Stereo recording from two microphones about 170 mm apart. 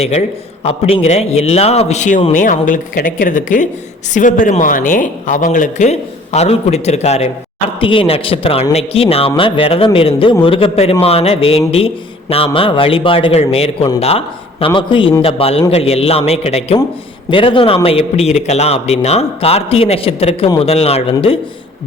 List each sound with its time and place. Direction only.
0.0 s a man's voice: 40° left (ahead or behind)